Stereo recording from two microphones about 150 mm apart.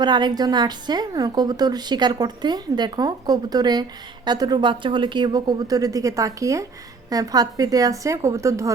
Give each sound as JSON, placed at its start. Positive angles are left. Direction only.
{"t": 0.0, "sound": "a woman's voice", "side_deg": -30}